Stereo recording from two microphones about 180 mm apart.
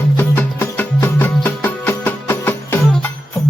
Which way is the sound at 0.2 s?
10° left (ahead or behind).